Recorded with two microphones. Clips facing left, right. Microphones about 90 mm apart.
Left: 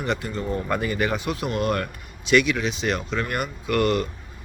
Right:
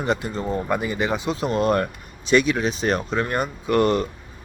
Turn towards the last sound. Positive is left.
turn(degrees=-35)  # may be behind; listen again after turning